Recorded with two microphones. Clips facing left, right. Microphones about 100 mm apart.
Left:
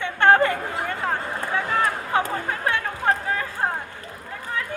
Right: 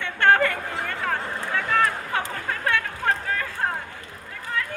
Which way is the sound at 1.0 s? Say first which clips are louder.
Left 1 dB; 20° left (ahead or behind).